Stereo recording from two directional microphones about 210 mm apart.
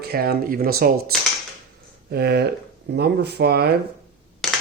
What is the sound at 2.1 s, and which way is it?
Speech, 50° right (ahead or behind).